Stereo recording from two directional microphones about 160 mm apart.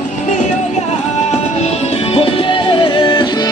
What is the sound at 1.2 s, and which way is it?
Music, 45° left (ahead or behind).